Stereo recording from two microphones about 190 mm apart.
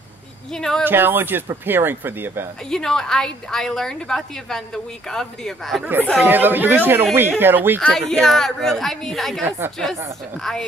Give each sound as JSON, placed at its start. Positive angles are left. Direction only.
{"t": 0.5, "sound": "a woman's voice", "side_deg": 5}
{"t": 0.8, "sound": "speech", "side_deg": -10}
{"t": 2.7, "sound": "a woman's voice", "side_deg": 5}
{"t": 6.2, "sound": "speech", "side_deg": -10}
{"t": 7.8, "sound": "a woman's voice", "side_deg": 5}